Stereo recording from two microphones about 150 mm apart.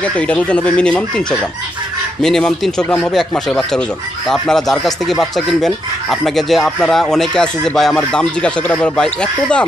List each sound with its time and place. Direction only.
0.0 s speech: 10° left (ahead or behind)
2.2 s speech: 5° left (ahead or behind)